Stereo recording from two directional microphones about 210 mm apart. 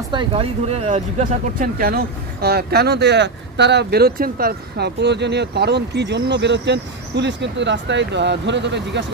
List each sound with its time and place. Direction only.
0.1 s speech: 25° right (ahead or behind)
1.8 s speech: 45° right (ahead or behind)